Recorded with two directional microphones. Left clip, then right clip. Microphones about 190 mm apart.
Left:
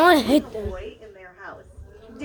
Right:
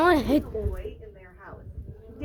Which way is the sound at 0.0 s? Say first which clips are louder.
Left 5 dB; 10° left (ahead or behind).